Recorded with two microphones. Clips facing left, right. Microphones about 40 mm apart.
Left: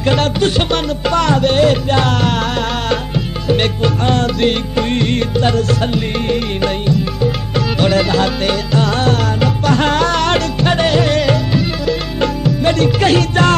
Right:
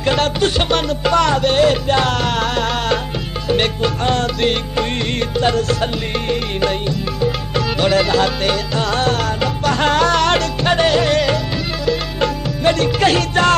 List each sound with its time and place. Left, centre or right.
0.0 s music: centre
3.4 s music: centre
7.5 s music: centre